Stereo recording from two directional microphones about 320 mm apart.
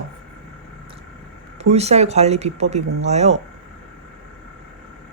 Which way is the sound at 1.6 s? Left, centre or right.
Centre.